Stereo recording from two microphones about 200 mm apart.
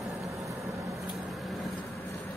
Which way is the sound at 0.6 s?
15° right (ahead or behind).